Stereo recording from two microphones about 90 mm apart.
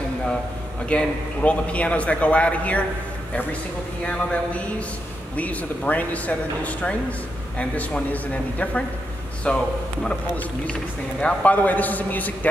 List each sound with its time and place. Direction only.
0.8 s speech: 15° left (ahead or behind)
4.0 s speech: 15° left (ahead or behind)